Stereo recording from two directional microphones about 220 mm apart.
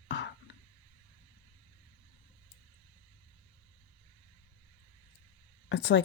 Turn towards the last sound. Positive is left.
turn(degrees=55)  # may be behind; listen again after turning